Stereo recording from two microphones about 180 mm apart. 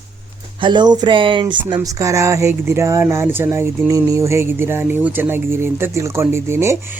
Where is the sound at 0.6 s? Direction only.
25° right (ahead or behind).